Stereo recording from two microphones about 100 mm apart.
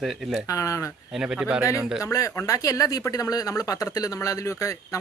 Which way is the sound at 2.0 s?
35° left (ahead or behind).